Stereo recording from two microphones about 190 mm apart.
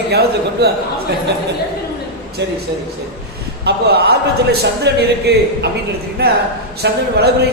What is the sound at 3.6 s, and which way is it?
A man's voice, 55° right (ahead or behind).